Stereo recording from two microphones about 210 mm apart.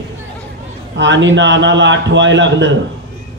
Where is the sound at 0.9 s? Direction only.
60° right (ahead or behind).